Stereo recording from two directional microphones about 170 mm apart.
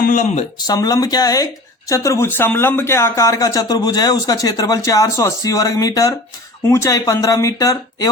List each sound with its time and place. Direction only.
0.0 s speech: 50° left (ahead or behind)
0.7 s speech: 20° left (ahead or behind)